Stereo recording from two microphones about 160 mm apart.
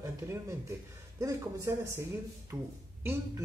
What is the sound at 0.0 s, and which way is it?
A man's voice, 20° right (ahead or behind).